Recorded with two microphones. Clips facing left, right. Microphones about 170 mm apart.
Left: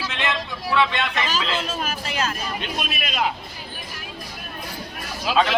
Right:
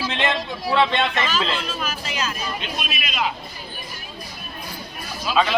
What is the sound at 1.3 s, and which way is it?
Speech, 45° left (ahead or behind).